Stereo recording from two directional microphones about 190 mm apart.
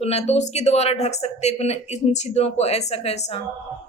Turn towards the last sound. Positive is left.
turn(degrees=35)  # may be behind; listen again after turning